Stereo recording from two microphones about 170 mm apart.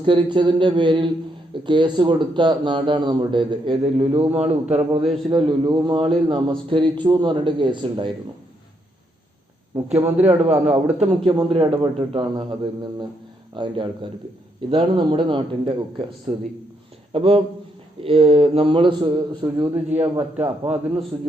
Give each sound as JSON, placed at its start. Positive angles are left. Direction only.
{"t": 0.0, "sound": "speech", "side_deg": -30}
{"t": 4.3, "sound": "a man's voice", "side_deg": -10}
{"t": 4.7, "sound": "a man's voice", "side_deg": -35}
{"t": 10.0, "sound": "a man's voice", "side_deg": -10}
{"t": 10.2, "sound": "a man's voice", "side_deg": -40}
{"t": 10.7, "sound": "a man's voice", "side_deg": -5}
{"t": 11.2, "sound": "a man's voice", "side_deg": -30}
{"t": 20.1, "sound": "a man's voice", "side_deg": -10}